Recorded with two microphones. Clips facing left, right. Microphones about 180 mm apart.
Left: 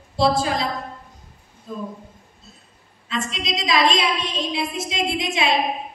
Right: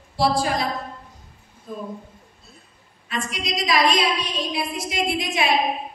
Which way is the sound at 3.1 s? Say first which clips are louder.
Left 1 dB; 25° left (ahead or behind).